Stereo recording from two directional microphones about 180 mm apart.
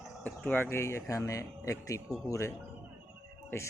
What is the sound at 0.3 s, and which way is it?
Speech, 10° left (ahead or behind).